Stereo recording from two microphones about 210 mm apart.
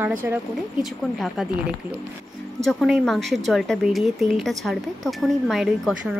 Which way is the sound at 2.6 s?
Centre (ahead or behind).